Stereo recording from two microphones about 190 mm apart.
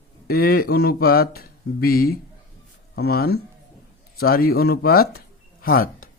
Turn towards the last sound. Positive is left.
turn(degrees=50)  # may be behind; listen again after turning